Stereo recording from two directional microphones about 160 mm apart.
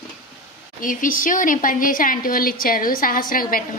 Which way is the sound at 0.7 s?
60° left (ahead or behind).